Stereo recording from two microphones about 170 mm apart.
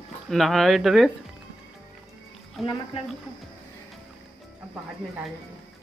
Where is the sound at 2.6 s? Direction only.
30° left (ahead or behind).